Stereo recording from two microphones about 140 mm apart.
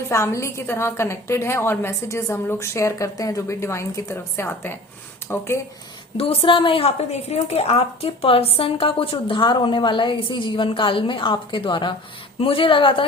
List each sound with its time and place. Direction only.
0.1 s a woman's voice: 20° left (ahead or behind)
6.1 s a woman's voice: 40° left (ahead or behind)